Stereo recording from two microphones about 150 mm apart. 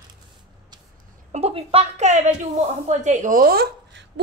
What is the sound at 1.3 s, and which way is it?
A woman's voice, 40° right (ahead or behind).